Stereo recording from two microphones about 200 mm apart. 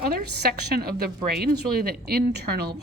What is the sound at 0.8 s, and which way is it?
A woman's voice, 50° right (ahead or behind).